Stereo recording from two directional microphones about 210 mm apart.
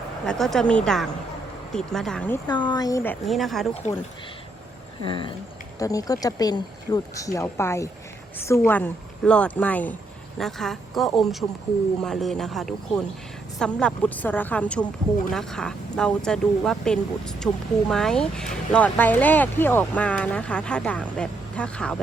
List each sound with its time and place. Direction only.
0.3 s speech: centre (ahead or behind)
2.5 s speech: 20° left (ahead or behind); by 3.7 s centre (ahead or behind)
5.0 s a sound: 25° left (ahead or behind)
5.8 s speech: 15° left (ahead or behind)